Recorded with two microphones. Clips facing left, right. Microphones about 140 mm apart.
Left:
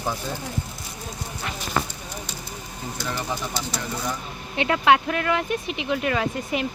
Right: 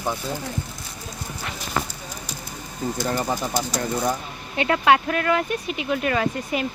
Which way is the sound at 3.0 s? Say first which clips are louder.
Right 4 dB; 45° right (ahead or behind).